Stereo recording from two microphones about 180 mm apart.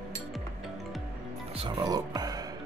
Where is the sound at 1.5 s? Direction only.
25° right (ahead or behind).